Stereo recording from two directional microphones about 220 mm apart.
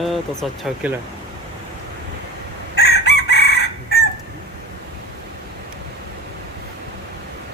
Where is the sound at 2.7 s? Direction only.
45° left (ahead or behind).